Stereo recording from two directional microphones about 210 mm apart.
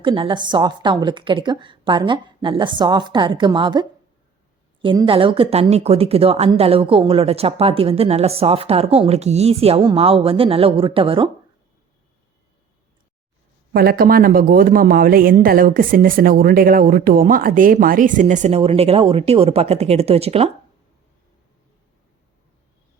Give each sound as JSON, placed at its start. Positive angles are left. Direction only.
{"t": 0.0, "sound": "speech", "side_deg": -25}
{"t": 13.7, "sound": "speech", "side_deg": -45}